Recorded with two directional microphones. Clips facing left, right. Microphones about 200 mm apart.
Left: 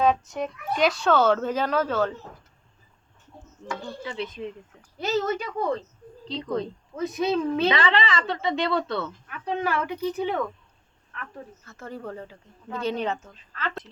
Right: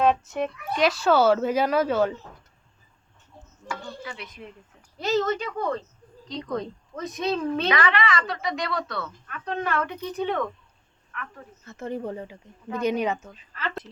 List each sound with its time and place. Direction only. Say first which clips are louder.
0.0 s speech: right 1 dB; 5° right (ahead or behind)
4.0 s a woman's voice: left 7 dB; 30° left (ahead or behind)
4.9 s a woman's voice: right 1 dB; 5° left (ahead or behind)
7.7 s a woman's voice: even; 25° left (ahead or behind)
9.2 s a woman's voice: left 2 dB; 10° left (ahead or behind)
11.1 s speech: right 2 dB; 30° left (ahead or behind)
11.6 s speech: right 7 dB; 20° right (ahead or behind)